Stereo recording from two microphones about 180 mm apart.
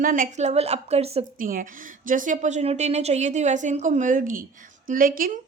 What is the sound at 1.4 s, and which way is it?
A woman's voice, 50° right (ahead or behind).